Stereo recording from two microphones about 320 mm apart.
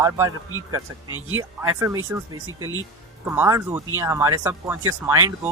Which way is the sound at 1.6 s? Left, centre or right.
Centre.